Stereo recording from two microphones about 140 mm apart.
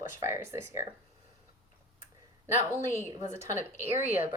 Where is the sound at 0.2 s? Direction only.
20° right (ahead or behind).